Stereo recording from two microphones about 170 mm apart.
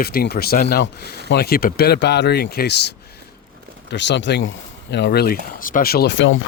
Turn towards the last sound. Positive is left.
turn(degrees=90)